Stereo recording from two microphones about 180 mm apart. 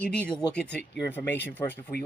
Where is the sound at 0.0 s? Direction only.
5° left (ahead or behind).